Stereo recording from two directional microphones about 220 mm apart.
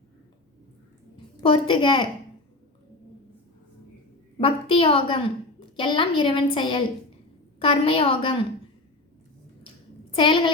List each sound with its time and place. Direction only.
1.1 s a woman's voice: 25° left (ahead or behind)
4.4 s a woman's voice: 25° left (ahead or behind)
10.2 s a woman's voice: 20° left (ahead or behind)